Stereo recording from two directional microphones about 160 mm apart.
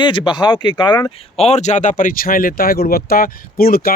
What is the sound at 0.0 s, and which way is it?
Speech, 30° left (ahead or behind).